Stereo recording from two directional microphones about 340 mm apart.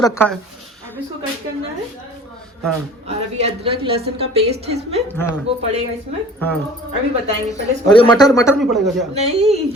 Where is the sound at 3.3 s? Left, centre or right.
Centre.